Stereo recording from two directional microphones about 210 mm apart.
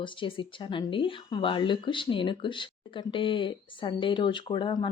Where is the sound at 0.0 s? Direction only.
25° left (ahead or behind).